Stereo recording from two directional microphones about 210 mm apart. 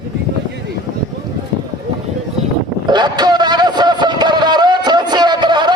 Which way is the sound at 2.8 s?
20° right (ahead or behind).